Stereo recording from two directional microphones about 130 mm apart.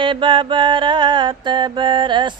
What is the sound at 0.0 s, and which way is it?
Mantra, 40° right (ahead or behind).